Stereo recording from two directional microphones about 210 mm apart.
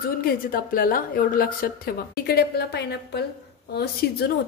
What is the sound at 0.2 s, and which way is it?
A woman's voice, 45° left (ahead or behind).